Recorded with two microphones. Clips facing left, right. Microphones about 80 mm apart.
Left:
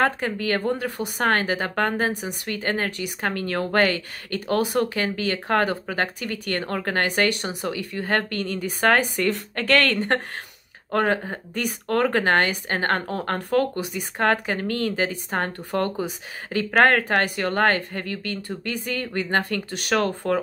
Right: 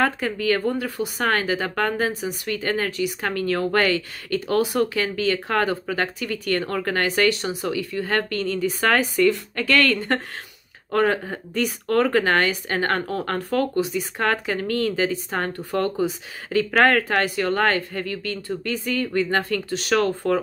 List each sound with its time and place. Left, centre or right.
0.0 s speech: left
9.3 s speech: left
10.9 s speech: left